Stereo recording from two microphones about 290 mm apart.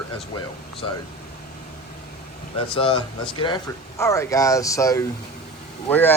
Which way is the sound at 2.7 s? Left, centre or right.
Centre.